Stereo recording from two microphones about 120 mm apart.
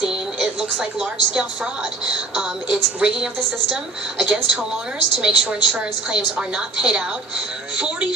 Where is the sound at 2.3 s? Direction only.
5° right (ahead or behind).